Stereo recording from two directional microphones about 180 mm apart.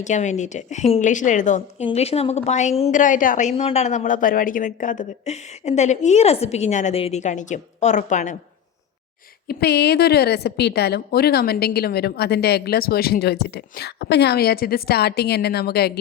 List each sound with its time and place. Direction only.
0.0 s a woman's voice: 40° left (ahead or behind)
9.5 s a woman's voice: 60° left (ahead or behind)